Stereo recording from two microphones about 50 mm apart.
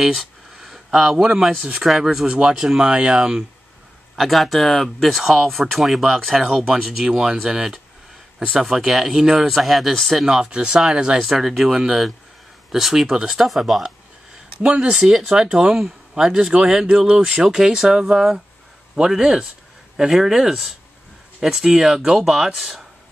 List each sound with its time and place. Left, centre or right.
0.0 s a sound: centre
0.8 s a man's voice: centre
4.2 s speech: centre
10.5 s speech: right
11.1 s speech: centre
14.6 s speech: right; by 22.8 s centre